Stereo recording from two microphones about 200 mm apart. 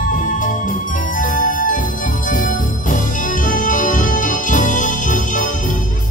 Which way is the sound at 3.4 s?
40° left (ahead or behind).